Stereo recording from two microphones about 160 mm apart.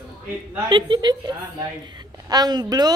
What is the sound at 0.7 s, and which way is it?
A woman's voice, 30° right (ahead or behind).